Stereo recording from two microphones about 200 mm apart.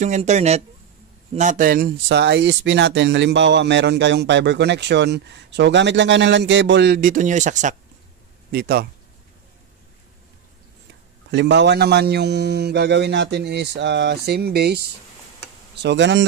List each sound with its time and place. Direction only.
0.0 s speech: 35° right (ahead or behind)
8.5 s speech: 50° right (ahead or behind)
11.2 s speech: 60° right (ahead or behind)